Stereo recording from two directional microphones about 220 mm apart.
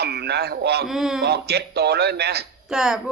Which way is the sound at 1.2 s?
45° right (ahead or behind).